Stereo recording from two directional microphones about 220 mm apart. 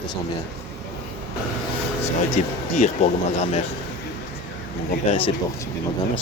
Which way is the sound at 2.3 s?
30° left (ahead or behind).